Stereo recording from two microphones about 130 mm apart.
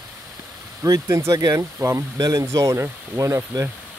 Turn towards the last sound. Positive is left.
turn(degrees=-25)  # may be behind; listen again after turning